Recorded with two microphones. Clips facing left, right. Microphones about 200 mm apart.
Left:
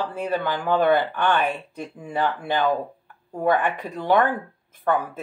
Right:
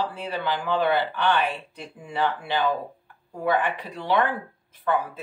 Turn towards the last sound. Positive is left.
turn(degrees=50)  # may be behind; listen again after turning